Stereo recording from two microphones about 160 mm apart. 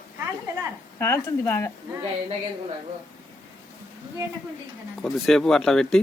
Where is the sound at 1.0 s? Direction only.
15° left (ahead or behind).